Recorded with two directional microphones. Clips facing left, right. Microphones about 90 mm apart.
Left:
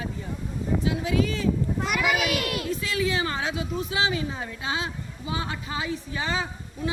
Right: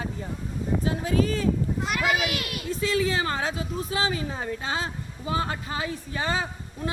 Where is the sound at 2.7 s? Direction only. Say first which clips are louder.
Right 6 dB; 35° right (ahead or behind).